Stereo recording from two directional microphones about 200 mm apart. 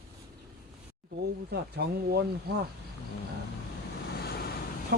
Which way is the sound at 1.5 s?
55° right (ahead or behind).